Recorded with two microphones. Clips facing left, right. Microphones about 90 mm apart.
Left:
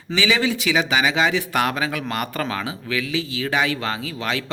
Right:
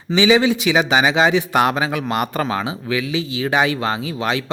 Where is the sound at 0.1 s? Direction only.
20° right (ahead or behind).